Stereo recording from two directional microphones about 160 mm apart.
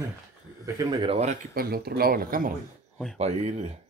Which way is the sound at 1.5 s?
70° right (ahead or behind).